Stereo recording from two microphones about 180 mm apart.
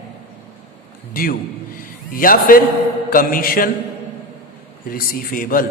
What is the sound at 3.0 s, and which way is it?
Speech, 55° left (ahead or behind).